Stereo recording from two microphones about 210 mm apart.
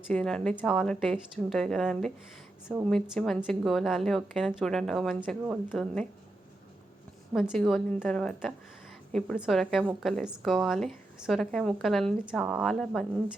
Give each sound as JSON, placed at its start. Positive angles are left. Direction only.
{"t": 0.1, "sound": "a woman's voice", "side_deg": 5}
{"t": 7.3, "sound": "a woman's voice", "side_deg": 0}